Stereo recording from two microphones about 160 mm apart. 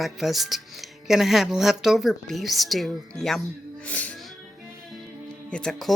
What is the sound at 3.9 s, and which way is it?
Music, 10° left (ahead or behind).